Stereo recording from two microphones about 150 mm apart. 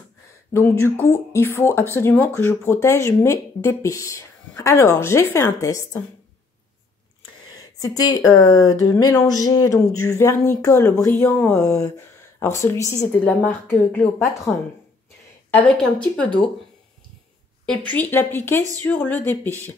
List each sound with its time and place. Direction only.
0.5 s speech: 15° left (ahead or behind)
7.5 s speech: 25° left (ahead or behind)
14.5 s speech: 10° left (ahead or behind)
17.6 s speech: 10° left (ahead or behind)